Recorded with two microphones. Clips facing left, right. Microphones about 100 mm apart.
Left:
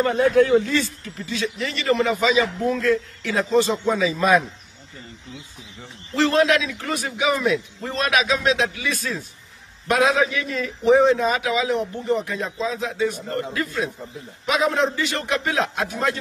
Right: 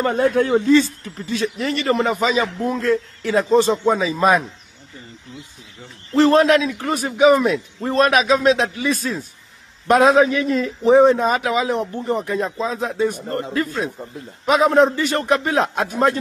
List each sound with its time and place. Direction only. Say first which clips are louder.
0.0 s a man's voice: even; 40° right (ahead or behind)
1.2 s a man's voice: right 4 dB; 45° right (ahead or behind)
6.1 s a man's voice: right 5 dB; 40° right (ahead or behind)